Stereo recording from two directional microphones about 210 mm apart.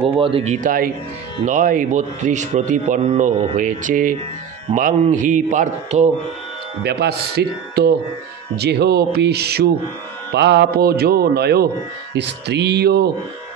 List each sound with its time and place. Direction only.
0.0 s speech: 25° right (ahead or behind)
6.8 s a man's voice: 50° right (ahead or behind)